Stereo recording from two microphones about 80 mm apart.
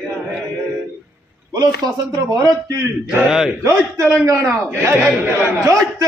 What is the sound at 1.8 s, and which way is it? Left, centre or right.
Speech, right.